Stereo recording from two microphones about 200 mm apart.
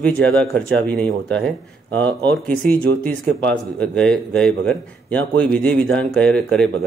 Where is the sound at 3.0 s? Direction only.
5° left (ahead or behind).